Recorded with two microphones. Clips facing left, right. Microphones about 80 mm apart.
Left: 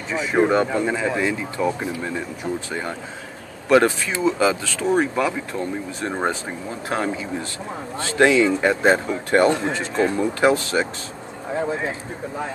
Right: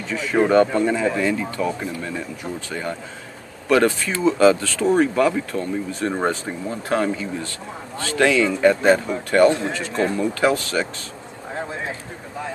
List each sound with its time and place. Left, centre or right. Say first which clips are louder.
0.1 s speech: right 1 dB; centre